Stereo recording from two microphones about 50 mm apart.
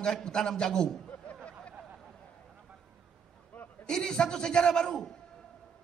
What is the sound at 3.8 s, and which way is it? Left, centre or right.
A man's voice, centre.